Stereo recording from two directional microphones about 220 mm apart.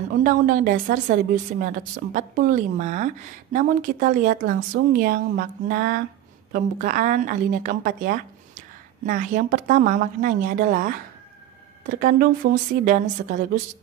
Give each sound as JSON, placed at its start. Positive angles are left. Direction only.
{"t": 0.1, "sound": "speech", "side_deg": -35}